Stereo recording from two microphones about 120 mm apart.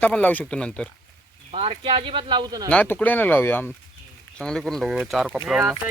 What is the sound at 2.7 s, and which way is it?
Speech, 10° left (ahead or behind).